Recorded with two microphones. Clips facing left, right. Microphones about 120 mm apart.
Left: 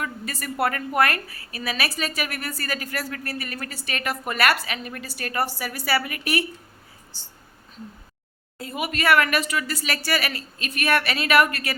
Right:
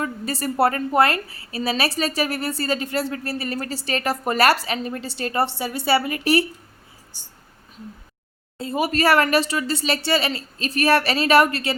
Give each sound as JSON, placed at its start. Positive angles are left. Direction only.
{"t": 0.0, "sound": "a woman's voice", "side_deg": -30}
{"t": 7.1, "sound": "speech", "side_deg": -15}
{"t": 8.5, "sound": "speech", "side_deg": -30}